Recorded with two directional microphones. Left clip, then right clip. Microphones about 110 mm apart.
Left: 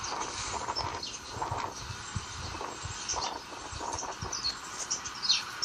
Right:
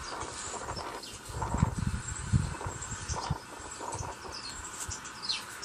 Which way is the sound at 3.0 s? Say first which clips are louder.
Left 4 dB; 35° left (ahead or behind).